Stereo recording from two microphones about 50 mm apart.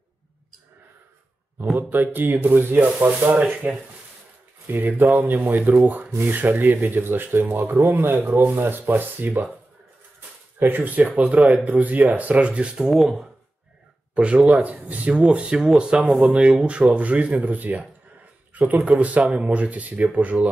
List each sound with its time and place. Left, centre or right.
1.7 s speech: right
7.5 s speech: right
10.6 s speech: right
12.7 s speech: centre
14.1 s speech: right
15.2 s speech: centre